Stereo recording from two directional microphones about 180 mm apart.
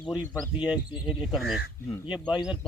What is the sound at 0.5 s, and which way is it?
Speech, 5° right (ahead or behind).